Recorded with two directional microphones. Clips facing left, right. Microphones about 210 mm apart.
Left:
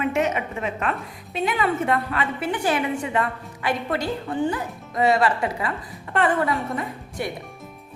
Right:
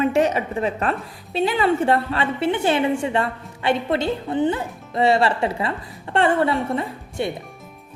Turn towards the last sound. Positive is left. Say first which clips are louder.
# right 3 dB
turn(degrees=-25)  # may be behind; listen again after turning